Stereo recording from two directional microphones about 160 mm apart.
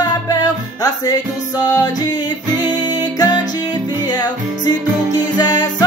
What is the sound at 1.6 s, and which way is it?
Music, 25° left (ahead or behind).